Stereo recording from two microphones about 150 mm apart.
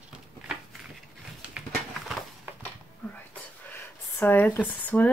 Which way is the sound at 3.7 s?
15° left (ahead or behind).